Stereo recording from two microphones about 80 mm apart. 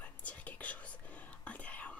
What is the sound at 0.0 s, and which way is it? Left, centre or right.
Whispering, centre.